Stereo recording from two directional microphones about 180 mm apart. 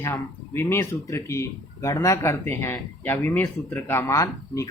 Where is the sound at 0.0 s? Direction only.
15° left (ahead or behind).